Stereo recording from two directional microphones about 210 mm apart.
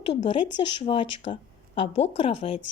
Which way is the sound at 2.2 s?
25° left (ahead or behind).